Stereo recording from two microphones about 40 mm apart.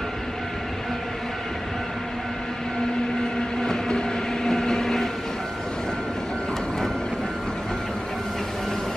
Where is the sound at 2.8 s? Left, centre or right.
Centre.